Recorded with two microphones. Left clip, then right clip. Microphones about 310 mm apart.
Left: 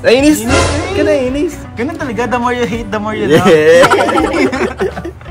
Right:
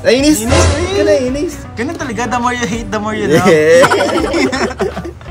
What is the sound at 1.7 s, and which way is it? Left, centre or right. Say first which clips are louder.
A man's voice: left 1 dB; centre.